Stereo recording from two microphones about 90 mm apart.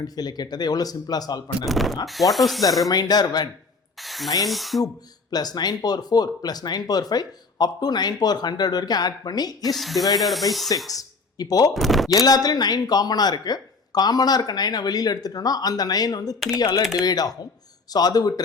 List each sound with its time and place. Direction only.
0.0 s speech: 50° left (ahead or behind)
1.6 s speech: centre (ahead or behind)
2.9 s speech: 50° left (ahead or behind)
4.0 s spray: centre (ahead or behind)
4.4 s speech: centre (ahead or behind)
5.3 s speech: 50° left (ahead or behind)
9.7 s speech: centre (ahead or behind)
10.8 s speech: 45° left (ahead or behind)
11.7 s speech: centre (ahead or behind)
12.0 s speech: 45° left (ahead or behind)